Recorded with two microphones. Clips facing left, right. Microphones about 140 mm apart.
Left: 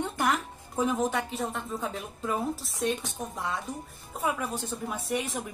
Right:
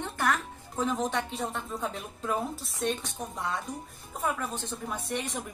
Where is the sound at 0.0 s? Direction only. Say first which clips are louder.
Left 1 dB; 15° left (ahead or behind).